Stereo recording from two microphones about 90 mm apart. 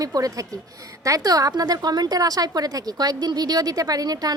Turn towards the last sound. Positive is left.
turn(degrees=-45)  # may be behind; listen again after turning